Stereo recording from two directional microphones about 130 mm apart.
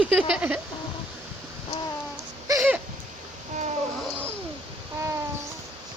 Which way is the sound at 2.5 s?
15° right (ahead or behind).